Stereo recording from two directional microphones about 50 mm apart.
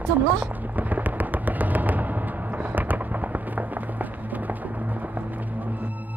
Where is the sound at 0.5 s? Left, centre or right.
Right.